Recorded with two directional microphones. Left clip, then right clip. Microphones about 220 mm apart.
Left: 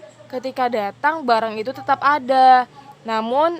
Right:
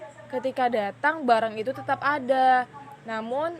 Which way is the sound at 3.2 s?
25° left (ahead or behind).